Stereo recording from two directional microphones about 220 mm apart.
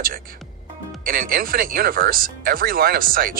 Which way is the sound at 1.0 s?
40° right (ahead or behind).